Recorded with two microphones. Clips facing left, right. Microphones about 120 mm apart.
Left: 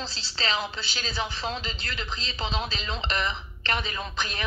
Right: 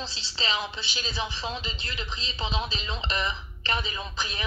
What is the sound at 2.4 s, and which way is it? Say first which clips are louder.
Speech: even; 30° left (ahead or behind).